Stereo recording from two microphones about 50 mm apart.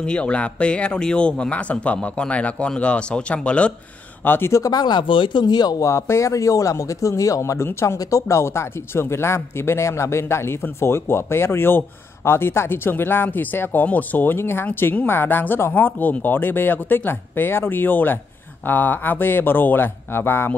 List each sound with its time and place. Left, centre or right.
0.0 s speech: left
4.2 s speech: left
5.8 s speech: left
7.8 s speech: left
14.3 s speech: left